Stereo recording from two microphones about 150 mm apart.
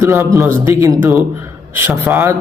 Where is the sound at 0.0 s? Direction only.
20° right (ahead or behind).